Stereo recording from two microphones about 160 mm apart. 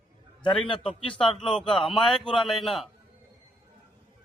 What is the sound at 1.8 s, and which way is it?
Speech, 30° left (ahead or behind).